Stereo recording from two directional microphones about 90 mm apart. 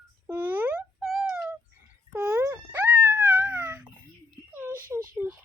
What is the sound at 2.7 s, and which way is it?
Wail, 20° right (ahead or behind).